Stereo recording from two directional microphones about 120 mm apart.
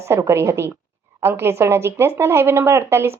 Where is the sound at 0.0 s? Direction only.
25° right (ahead or behind).